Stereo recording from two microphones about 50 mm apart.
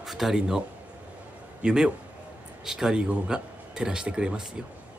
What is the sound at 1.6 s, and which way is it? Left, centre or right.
Speech, centre.